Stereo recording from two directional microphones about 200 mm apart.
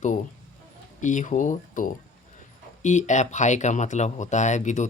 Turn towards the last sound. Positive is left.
turn(degrees=35)  # may be behind; listen again after turning